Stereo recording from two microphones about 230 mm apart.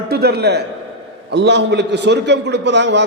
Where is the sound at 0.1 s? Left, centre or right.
Right.